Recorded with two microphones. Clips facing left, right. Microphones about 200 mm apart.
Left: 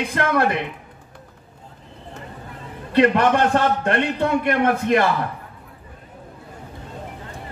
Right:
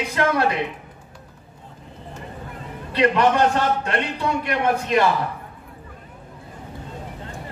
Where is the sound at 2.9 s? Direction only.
50° left (ahead or behind).